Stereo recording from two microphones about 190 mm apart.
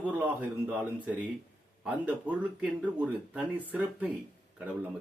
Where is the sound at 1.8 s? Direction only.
5° right (ahead or behind).